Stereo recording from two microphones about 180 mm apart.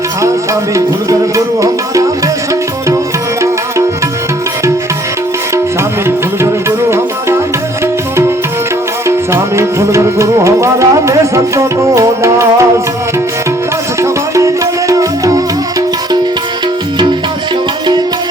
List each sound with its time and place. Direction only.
1.6 s music: 20° right (ahead or behind)
6.1 s music: 15° right (ahead or behind)
9.0 s tabla: 15° right (ahead or behind)
14.0 s music: 15° right (ahead or behind)